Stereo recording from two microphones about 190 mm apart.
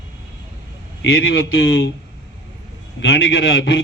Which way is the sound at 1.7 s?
75° left (ahead or behind).